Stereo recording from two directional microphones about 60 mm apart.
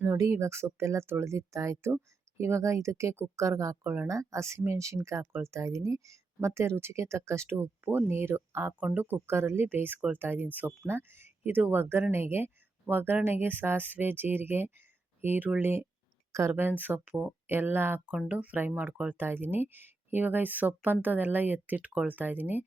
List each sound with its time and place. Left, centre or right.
0.2 s speech: right
7.5 s speech: right
8.8 s speech: right
9.0 s speech: right
10.8 s speech: right
16.3 s speech: right
16.6 s speech: right
18.3 s speech: right
21.8 s speech: right